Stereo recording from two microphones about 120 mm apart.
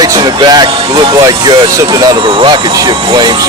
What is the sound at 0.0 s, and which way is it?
Speech, 35° right (ahead or behind).